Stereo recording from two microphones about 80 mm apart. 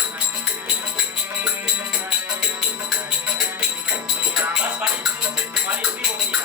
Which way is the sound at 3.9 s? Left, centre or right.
Centre.